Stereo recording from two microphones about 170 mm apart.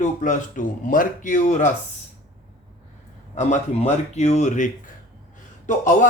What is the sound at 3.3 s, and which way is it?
Speech, 45° left (ahead or behind).